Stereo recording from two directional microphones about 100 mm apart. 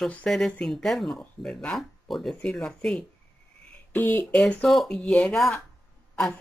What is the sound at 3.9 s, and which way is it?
Speech, 20° left (ahead or behind).